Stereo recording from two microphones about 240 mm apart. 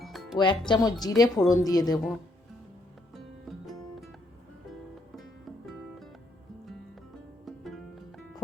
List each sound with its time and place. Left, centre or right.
0.0 s music: centre
0.3 s speech: centre
5.1 s music: centre
7.4 s music: centre